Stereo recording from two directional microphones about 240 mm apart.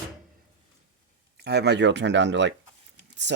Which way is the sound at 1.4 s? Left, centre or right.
Right.